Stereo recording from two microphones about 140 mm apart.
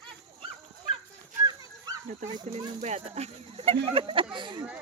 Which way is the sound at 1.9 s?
25° right (ahead or behind).